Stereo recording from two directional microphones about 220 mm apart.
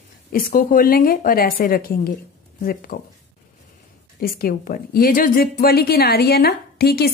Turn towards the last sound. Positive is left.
turn(degrees=45)  # may be behind; listen again after turning